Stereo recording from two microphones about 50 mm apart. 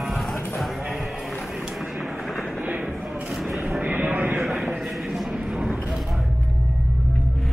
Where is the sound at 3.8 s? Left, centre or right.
Right.